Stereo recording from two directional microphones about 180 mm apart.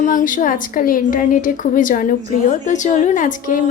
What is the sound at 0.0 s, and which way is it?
Speech, 45° left (ahead or behind).